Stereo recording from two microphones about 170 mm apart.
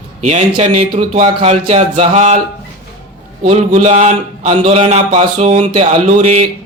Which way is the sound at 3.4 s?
40° right (ahead or behind).